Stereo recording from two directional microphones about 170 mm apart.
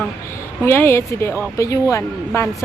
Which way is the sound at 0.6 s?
15° left (ahead or behind).